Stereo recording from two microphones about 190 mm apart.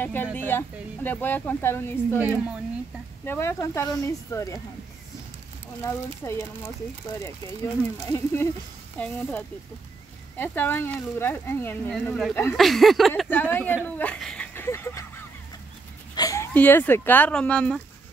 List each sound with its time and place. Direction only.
0.0 s speech: 10° left (ahead or behind)
2.1 s a woman's voice: 10° right (ahead or behind)
3.3 s speech: 15° left (ahead or behind)
5.9 s speech: 15° left (ahead or behind)
16.2 s a sound: 20° left (ahead or behind)
16.5 s speech: 10° left (ahead or behind)